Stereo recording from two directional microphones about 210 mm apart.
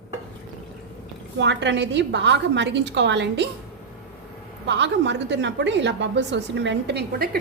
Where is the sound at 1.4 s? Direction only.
60° right (ahead or behind).